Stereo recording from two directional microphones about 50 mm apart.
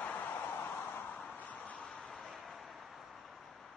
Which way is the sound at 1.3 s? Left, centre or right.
Left.